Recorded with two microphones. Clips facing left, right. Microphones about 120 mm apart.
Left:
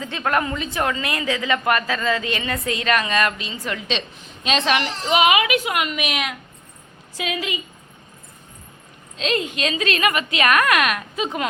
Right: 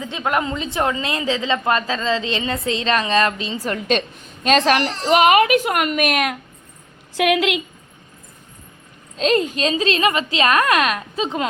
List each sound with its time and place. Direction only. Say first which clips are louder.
0.0 s a woman's voice: right 1 dB; 15° right (ahead or behind); by 4.8 s 45° right (ahead or behind)
4.8 s a child's voice: right 5 dB; centre (ahead or behind)
5.1 s a woman's voice: right 4 dB; 45° right (ahead or behind)
7.1 s a woman's voice: right 9 dB; 75° right (ahead or behind)
9.1 s a woman's voice: right 5 dB; 40° right (ahead or behind)